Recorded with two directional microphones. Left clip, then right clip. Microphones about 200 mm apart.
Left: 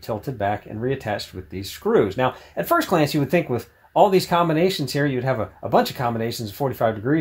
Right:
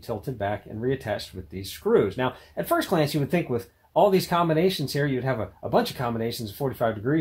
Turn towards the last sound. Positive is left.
turn(degrees=35)  # may be behind; listen again after turning